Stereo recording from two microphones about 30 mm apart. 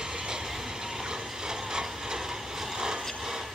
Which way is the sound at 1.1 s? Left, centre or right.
Right.